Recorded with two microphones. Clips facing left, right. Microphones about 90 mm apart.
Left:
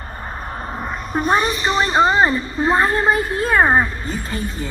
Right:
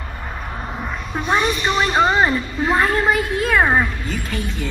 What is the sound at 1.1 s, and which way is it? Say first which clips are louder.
A woman's voice: left 2 dB; 40° left (ahead or behind).